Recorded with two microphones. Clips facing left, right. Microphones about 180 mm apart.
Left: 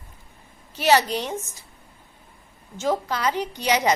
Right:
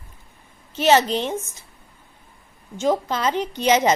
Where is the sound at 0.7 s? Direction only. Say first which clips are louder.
Right 3 dB; 20° right (ahead or behind).